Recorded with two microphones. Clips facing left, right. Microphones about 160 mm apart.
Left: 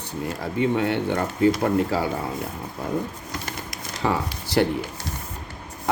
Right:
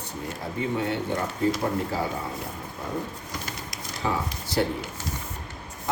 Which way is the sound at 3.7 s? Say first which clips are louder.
Left 4 dB; 70° left (ahead or behind).